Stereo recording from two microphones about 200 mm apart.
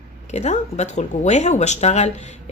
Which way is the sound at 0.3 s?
35° left (ahead or behind).